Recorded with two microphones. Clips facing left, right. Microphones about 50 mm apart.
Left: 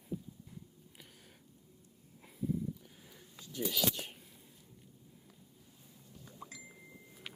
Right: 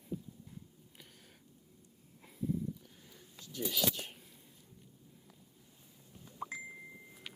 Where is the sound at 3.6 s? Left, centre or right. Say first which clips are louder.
Left 1 dB; centre.